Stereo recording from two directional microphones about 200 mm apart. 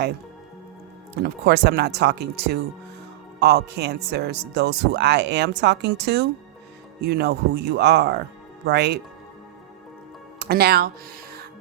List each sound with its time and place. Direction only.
1.2 s speech: 55° right (ahead or behind)
10.5 s speech: 55° right (ahead or behind)